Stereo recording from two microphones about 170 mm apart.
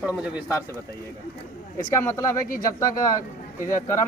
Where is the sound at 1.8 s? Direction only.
15° left (ahead or behind).